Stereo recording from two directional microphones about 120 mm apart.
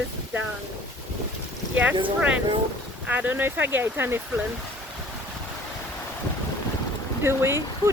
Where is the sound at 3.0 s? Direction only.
15° right (ahead or behind).